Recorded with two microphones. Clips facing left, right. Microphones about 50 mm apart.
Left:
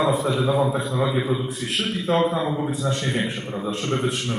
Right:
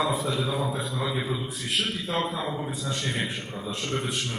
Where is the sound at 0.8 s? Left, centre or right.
Centre.